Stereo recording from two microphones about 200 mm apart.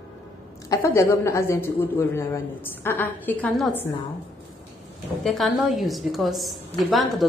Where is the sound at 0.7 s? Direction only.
15° left (ahead or behind).